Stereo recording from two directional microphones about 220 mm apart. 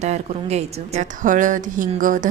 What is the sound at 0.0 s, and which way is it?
A woman's voice, 30° right (ahead or behind).